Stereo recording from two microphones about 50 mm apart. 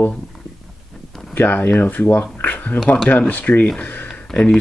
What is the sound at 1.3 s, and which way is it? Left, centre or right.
Speech, left.